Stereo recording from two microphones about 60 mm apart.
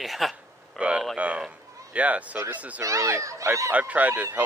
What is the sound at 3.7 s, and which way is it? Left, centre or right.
Speech, right.